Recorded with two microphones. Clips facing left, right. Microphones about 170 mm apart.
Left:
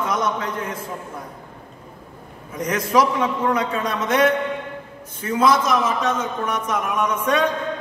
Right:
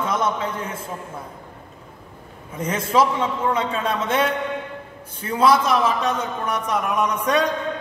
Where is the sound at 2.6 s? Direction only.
25° right (ahead or behind).